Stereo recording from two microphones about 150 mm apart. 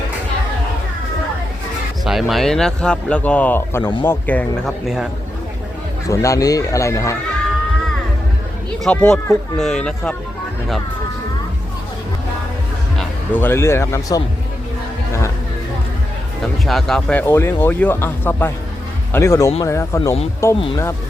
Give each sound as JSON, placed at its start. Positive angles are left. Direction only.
{"t": 2.0, "sound": "speech", "side_deg": 0}
{"t": 6.1, "sound": "speech", "side_deg": 20}
{"t": 8.8, "sound": "speech", "side_deg": 5}
{"t": 13.3, "sound": "speech", "side_deg": 15}
{"t": 16.6, "sound": "speech", "side_deg": 0}